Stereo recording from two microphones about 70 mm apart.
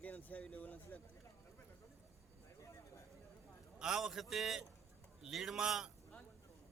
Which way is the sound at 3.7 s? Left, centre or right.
Centre.